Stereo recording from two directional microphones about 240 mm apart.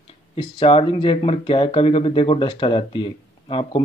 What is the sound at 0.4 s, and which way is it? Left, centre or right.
Speech, left.